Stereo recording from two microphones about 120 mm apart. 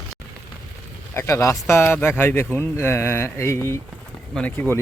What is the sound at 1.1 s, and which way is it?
Speech, 25° left (ahead or behind).